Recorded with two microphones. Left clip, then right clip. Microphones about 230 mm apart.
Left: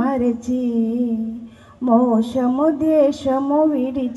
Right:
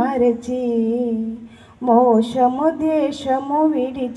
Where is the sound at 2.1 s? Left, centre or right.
Right.